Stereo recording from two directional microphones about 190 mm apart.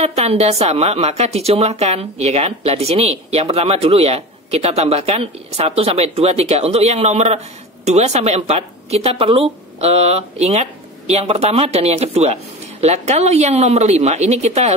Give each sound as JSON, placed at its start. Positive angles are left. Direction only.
{"t": 0.0, "sound": "a woman's voice", "side_deg": -35}